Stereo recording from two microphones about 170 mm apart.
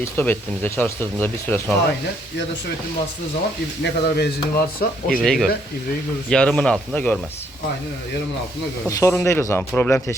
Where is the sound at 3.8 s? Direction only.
75° left (ahead or behind).